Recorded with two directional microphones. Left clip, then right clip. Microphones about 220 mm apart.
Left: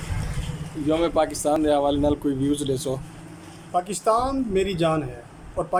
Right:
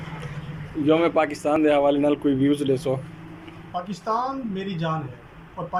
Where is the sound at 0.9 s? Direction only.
15° left (ahead or behind).